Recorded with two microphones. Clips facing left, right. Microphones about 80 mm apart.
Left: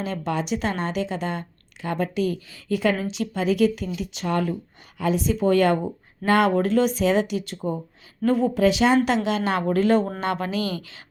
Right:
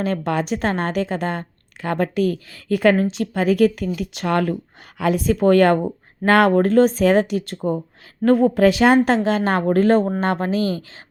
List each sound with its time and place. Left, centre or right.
0.0 s speech: right
9.0 s speech: right